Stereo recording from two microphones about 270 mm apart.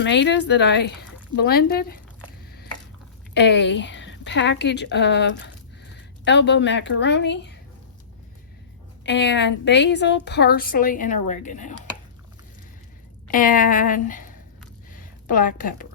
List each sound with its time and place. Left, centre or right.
0.0 s a woman's voice: left
3.3 s a woman's voice: left
9.0 s a woman's voice: left
13.3 s a woman's voice: left
15.3 s a woman's voice: left